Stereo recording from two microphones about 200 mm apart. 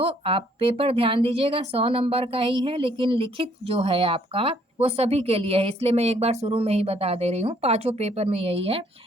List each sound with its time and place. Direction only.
0.0 s speech: 25° right (ahead or behind)